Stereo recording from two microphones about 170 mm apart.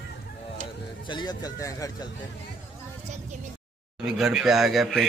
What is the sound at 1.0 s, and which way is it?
Speech, 25° left (ahead or behind).